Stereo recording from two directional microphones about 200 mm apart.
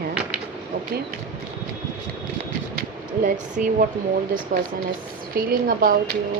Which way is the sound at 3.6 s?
45° right (ahead or behind).